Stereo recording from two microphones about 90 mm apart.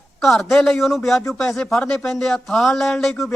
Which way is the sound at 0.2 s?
Centre (ahead or behind).